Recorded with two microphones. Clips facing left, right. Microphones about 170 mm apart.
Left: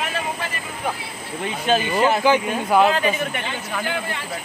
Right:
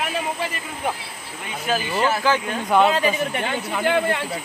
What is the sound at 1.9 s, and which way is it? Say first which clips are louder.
Speech: left 2 dB; 15° left (ahead or behind).